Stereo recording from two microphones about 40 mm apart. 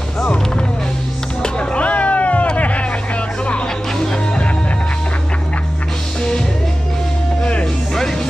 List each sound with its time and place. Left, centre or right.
1.4 s music: left
4.0 s music: centre
7.6 s music: centre